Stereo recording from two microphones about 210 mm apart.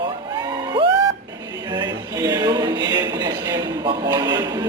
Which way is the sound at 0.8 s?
25° right (ahead or behind).